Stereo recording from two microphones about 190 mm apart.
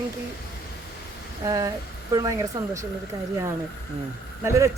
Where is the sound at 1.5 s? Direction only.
20° right (ahead or behind).